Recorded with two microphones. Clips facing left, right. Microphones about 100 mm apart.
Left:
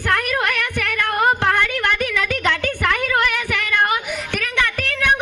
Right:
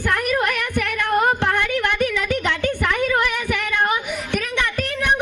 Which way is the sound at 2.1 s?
90° left.